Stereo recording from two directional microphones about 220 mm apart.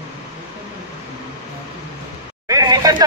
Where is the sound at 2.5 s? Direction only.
15° right (ahead or behind).